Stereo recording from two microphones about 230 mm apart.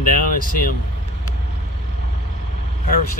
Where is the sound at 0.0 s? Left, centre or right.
Left.